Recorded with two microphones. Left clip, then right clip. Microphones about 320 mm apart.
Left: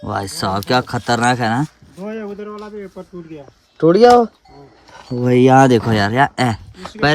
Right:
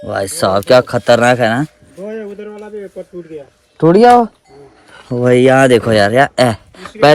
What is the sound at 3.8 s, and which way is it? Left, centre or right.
Speech, right.